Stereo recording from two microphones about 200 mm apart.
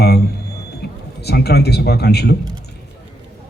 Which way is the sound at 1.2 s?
55° left (ahead or behind).